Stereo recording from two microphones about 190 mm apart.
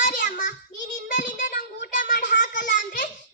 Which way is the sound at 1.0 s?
40° left (ahead or behind).